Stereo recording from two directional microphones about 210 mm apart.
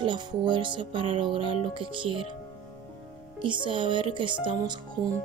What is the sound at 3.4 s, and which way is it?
Music, 25° right (ahead or behind).